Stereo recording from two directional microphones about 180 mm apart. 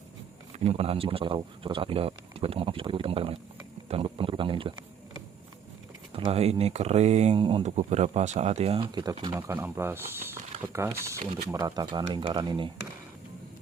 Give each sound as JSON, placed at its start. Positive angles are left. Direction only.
{"t": 0.6, "sound": "speech", "side_deg": -35}
{"t": 6.1, "sound": "speech", "side_deg": -30}